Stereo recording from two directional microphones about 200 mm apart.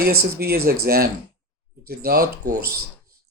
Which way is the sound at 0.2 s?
50° right (ahead or behind).